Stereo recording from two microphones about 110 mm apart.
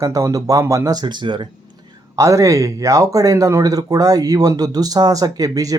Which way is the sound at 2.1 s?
30° right (ahead or behind).